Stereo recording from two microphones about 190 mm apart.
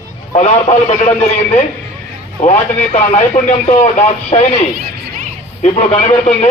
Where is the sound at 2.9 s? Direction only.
35° left (ahead or behind).